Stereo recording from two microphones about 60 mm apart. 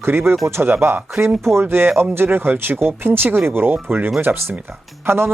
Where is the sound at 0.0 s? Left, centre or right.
Right.